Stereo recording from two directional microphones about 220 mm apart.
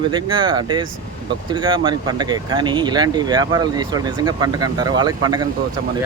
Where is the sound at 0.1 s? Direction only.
20° right (ahead or behind).